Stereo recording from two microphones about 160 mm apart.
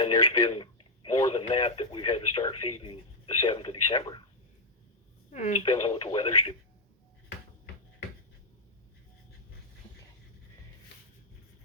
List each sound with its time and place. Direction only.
0.0 s radio: 25° left (ahead or behind)
1.3 s speech: 35° left (ahead or behind)
5.3 s speech: 45° left (ahead or behind)
5.8 s speech: 35° left (ahead or behind)